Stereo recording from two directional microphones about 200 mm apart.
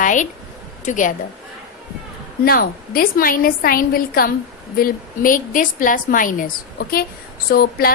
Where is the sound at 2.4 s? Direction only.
45° left (ahead or behind).